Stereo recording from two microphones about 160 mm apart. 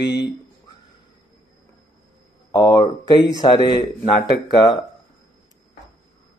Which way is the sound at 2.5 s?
25° left (ahead or behind).